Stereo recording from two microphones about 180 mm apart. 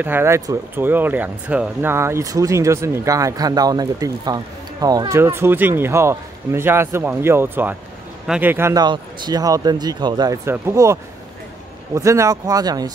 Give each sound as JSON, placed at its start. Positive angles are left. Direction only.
{"t": 0.0, "sound": "speech", "side_deg": -10}